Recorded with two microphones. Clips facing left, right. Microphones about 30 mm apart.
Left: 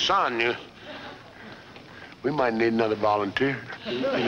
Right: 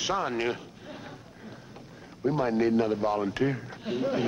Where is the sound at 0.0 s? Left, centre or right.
Left.